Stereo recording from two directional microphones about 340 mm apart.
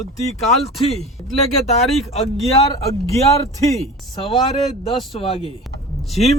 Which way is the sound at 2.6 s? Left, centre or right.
Centre.